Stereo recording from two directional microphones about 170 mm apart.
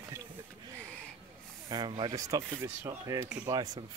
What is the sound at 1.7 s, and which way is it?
Speech, 25° right (ahead or behind).